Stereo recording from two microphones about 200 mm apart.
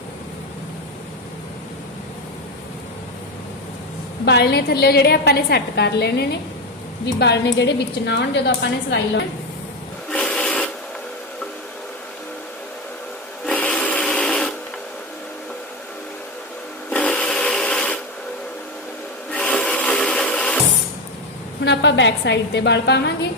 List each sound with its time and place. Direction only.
4.3 s a woman's voice: 55° left (ahead or behind)
10.1 s filing: 5° left (ahead or behind)
13.4 s a sound: 5° left (ahead or behind)
16.9 s a sound: 5° left (ahead or behind)
19.3 s rub: 5° left (ahead or behind)
21.6 s a woman's voice: 60° left (ahead or behind)